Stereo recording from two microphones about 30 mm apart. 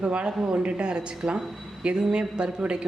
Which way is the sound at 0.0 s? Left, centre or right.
Right.